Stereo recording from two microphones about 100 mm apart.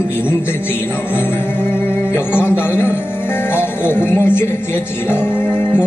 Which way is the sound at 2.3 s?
20° left (ahead or behind).